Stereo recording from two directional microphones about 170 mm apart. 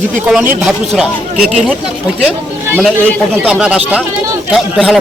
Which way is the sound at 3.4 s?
5° right (ahead or behind).